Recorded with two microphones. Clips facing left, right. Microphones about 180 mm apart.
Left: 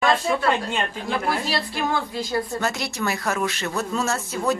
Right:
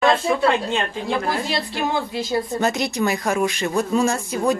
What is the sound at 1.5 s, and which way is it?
A woman's voice, 20° right (ahead or behind).